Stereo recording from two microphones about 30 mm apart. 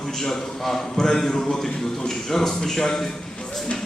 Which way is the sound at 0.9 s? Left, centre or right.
Left.